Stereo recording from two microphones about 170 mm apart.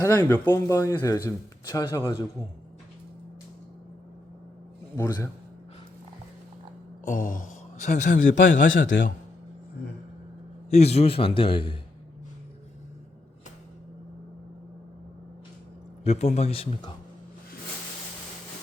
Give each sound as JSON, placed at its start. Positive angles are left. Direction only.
{"t": 0.0, "sound": "a man's voice", "side_deg": 10}
{"t": 4.9, "sound": "a man's voice", "side_deg": 15}
{"t": 7.0, "sound": "a man's voice", "side_deg": 50}
{"t": 8.7, "sound": "a man's voice", "side_deg": 90}
{"t": 10.7, "sound": "a man's voice", "side_deg": 40}
{"t": 16.0, "sound": "a man's voice", "side_deg": 40}